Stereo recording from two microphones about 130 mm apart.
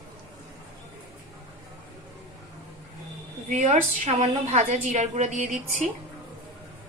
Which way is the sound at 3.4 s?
65° right (ahead or behind).